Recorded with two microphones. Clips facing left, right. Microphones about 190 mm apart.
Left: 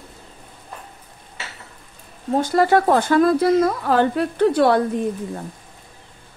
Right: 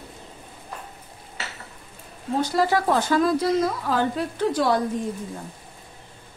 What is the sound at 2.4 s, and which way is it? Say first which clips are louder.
Speech: left 5 dB; 55° left (ahead or behind).